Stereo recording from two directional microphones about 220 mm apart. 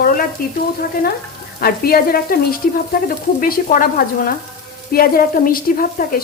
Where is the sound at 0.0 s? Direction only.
40° left (ahead or behind).